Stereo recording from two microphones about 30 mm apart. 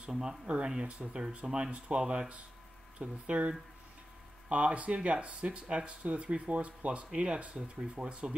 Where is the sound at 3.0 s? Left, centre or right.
Right.